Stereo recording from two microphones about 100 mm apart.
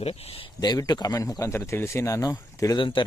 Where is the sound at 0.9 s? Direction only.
40° left (ahead or behind).